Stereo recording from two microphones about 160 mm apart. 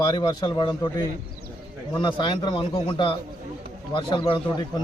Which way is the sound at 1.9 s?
30° left (ahead or behind).